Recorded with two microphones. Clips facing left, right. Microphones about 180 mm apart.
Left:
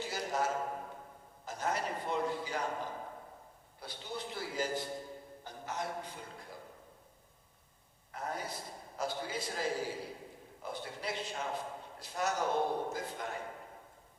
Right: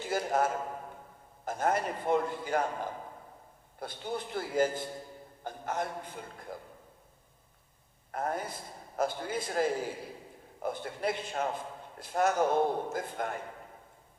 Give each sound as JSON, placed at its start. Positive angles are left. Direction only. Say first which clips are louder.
{"t": 0.0, "sound": "a sound", "louder": "right 6 dB", "side_deg": -50}
{"t": 1.5, "sound": "a man's voice", "louder": "right 6 dB", "side_deg": -50}
{"t": 8.1, "sound": "a man's voice", "louder": "right 6 dB", "side_deg": -50}